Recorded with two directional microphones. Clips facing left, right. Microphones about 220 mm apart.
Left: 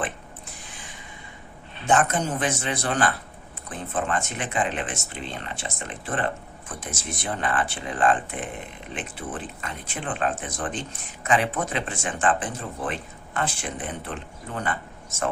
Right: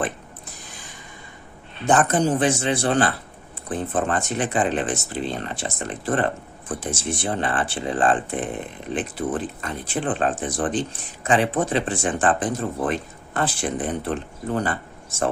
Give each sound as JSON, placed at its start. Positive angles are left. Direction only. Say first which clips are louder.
{"t": 1.9, "sound": "speech", "louder": "right 4 dB", "side_deg": -35}